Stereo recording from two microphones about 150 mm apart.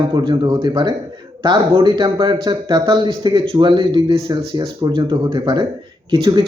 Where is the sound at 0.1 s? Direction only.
30° right (ahead or behind).